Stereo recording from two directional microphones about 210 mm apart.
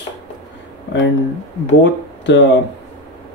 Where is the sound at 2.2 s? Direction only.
60° left (ahead or behind).